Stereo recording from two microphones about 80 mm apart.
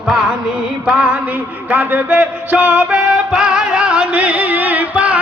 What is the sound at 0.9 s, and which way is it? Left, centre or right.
Music, centre.